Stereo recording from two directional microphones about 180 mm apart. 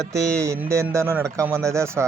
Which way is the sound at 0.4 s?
15° right (ahead or behind).